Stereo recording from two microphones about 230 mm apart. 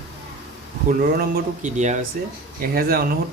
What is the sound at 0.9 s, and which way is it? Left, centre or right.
Speech, right.